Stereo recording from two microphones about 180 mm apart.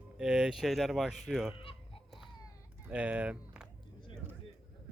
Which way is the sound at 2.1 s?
Centre (ahead or behind).